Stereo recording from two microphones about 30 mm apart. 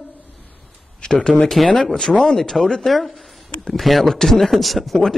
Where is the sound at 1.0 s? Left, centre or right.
Left.